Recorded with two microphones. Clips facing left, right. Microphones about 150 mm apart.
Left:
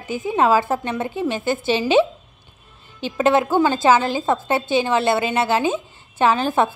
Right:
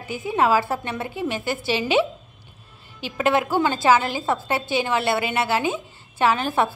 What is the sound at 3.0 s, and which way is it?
A woman's voice, 25° left (ahead or behind).